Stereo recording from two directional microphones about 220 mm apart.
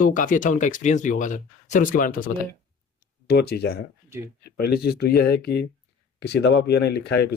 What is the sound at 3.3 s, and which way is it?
Speech, 45° left (ahead or behind).